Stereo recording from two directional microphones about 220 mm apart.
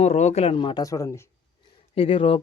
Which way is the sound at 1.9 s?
25° left (ahead or behind).